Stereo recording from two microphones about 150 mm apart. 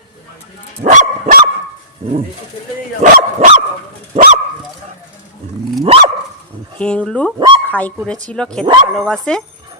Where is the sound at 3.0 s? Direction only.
55° right (ahead or behind).